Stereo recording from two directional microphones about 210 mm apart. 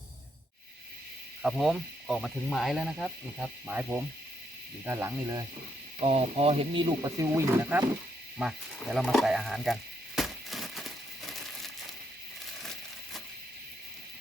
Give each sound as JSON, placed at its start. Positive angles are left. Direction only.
{"t": 1.4, "sound": "speech", "side_deg": 0}
{"t": 6.0, "sound": "speech", "side_deg": -30}
{"t": 10.2, "sound": "crumpling", "side_deg": 0}